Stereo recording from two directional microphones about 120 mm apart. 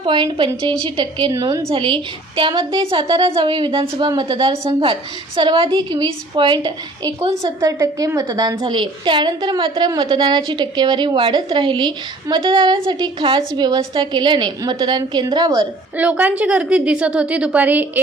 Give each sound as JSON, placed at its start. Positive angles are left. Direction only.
{"t": 0.0, "sound": "a woman's voice", "side_deg": -40}
{"t": 1.3, "sound": "a woman's voice", "side_deg": -30}
{"t": 1.7, "sound": "a woman's voice", "side_deg": -45}
{"t": 16.0, "sound": "a woman's voice", "side_deg": -15}